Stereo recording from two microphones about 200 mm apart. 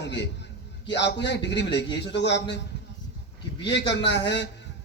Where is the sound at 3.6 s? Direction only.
60° left (ahead or behind).